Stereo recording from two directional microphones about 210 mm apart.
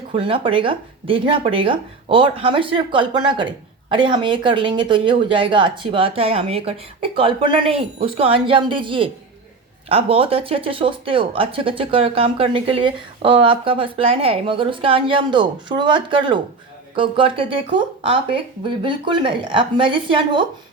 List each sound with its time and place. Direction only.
0.1 s speech: 25° right (ahead or behind)